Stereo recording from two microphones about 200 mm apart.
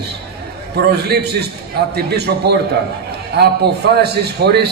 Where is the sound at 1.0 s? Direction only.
55° right (ahead or behind).